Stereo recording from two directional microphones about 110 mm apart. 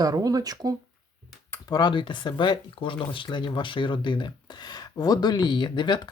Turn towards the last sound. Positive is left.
turn(degrees=45)  # may be behind; listen again after turning